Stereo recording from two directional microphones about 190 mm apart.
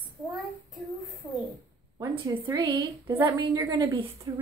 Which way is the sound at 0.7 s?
Centre (ahead or behind).